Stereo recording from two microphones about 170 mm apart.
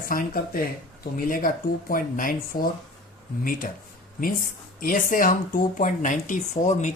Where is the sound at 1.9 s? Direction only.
55° left (ahead or behind).